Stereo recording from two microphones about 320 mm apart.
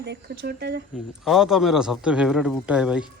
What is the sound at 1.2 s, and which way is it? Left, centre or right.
Speech, centre.